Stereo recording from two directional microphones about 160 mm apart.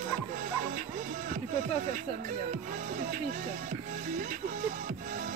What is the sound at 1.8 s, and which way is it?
Speech, 55° right (ahead or behind).